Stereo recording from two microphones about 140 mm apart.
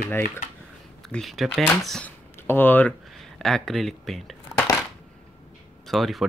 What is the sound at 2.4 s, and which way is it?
Speech, 15° left (ahead or behind).